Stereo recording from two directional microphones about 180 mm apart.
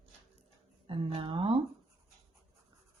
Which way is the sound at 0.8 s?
30° right (ahead or behind).